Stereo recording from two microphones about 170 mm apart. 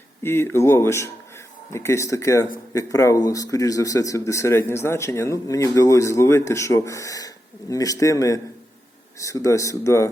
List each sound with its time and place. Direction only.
0.2 s speech: 15° left (ahead or behind)